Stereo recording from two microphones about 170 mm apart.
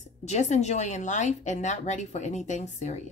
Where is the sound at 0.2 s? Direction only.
40° left (ahead or behind).